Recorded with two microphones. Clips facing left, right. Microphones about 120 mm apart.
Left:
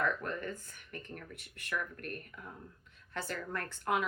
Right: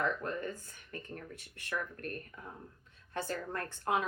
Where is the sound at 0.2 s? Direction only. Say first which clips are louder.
Right 1 dB; 25° right (ahead or behind).